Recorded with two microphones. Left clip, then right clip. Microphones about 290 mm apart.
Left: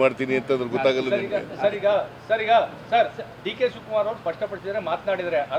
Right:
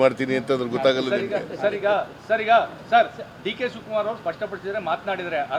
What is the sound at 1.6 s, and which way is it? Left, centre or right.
A man's voice, right.